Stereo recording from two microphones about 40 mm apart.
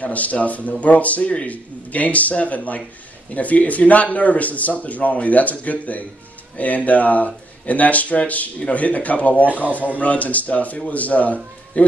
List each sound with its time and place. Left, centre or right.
0.0 s speech: left